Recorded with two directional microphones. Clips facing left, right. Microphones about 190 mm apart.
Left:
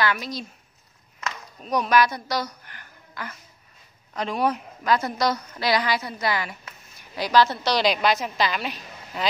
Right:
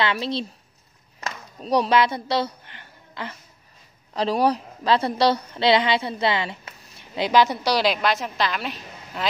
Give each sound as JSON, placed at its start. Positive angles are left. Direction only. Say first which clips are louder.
{"t": 0.0, "sound": "speech", "louder": "right 2 dB", "side_deg": -25}
{"t": 1.2, "sound": "a sound", "louder": "right 1 dB", "side_deg": -35}
{"t": 4.1, "sound": "a woman's voice", "louder": "right 4 dB", "side_deg": -35}